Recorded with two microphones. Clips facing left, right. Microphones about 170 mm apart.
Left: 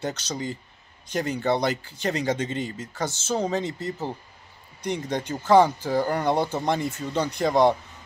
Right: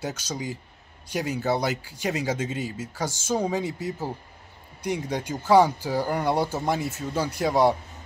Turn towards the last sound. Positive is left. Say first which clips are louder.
# left 1 dB
turn(degrees=-5)  # may be behind; listen again after turning